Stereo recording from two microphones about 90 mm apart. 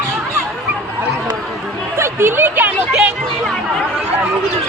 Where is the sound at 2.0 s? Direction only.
25° right (ahead or behind).